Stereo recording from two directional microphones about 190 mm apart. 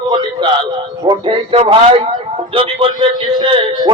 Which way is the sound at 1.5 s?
30° right (ahead or behind).